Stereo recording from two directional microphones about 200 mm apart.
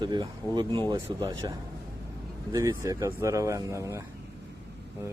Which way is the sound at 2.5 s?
15° right (ahead or behind).